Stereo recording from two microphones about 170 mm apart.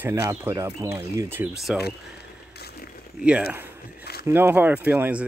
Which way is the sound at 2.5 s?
70° left (ahead or behind).